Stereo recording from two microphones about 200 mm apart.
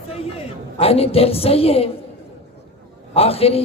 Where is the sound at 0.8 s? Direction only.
30° left (ahead or behind).